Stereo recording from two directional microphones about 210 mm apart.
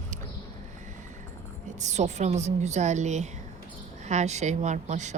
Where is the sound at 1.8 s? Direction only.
35° right (ahead or behind).